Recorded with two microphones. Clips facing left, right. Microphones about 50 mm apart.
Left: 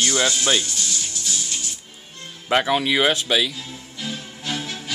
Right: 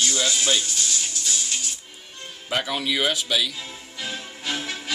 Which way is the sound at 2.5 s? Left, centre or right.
Left.